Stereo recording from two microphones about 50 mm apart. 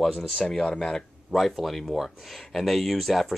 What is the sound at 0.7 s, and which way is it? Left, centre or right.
Speech, centre.